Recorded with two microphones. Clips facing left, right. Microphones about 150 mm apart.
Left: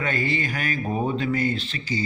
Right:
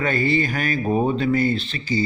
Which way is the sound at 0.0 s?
35° right (ahead or behind).